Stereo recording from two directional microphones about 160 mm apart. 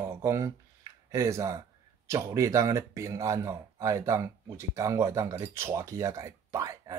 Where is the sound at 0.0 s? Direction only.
20° right (ahead or behind).